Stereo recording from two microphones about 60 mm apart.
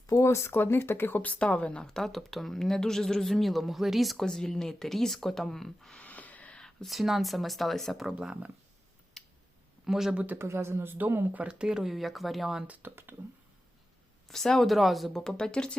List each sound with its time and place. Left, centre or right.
0.1 s speech: left; by 6.0 s centre
6.0 s a sound: left
6.6 s speech: centre
8.2 s speech: centre
9.2 s tick: centre
9.8 s speech: centre
10.3 s speech: right
10.9 s speech: right
11.3 s speech: centre
12.6 s speech: right
14.3 s speech: centre